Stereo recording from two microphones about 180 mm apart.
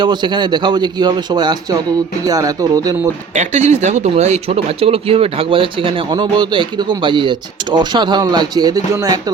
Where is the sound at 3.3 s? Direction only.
40° right (ahead or behind).